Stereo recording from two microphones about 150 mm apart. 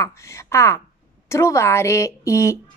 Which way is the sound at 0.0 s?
20° left (ahead or behind).